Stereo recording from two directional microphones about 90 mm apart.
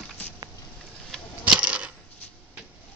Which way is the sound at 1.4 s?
15° right (ahead or behind).